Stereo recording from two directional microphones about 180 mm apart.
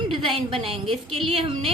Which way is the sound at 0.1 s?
30° right (ahead or behind).